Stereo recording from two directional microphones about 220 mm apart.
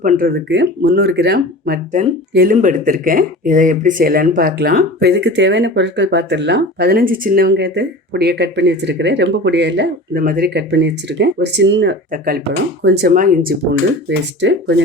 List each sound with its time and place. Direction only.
0.0 s speech: 40° right (ahead or behind)